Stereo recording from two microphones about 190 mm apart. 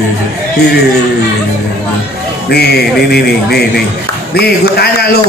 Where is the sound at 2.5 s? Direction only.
55° left (ahead or behind).